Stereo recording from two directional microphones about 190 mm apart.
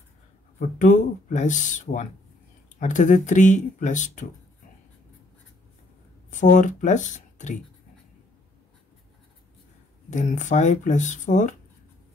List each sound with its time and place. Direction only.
0.6 s speech: 40° left (ahead or behind)
6.3 s speech: 40° left (ahead or behind)
10.0 s speech: 40° left (ahead or behind)